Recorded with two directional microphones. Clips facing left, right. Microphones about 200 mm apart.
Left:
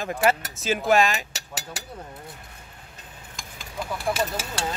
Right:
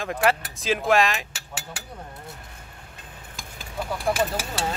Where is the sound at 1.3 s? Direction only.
40° left (ahead or behind).